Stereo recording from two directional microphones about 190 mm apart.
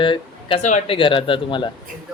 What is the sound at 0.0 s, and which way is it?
Speech, 25° left (ahead or behind).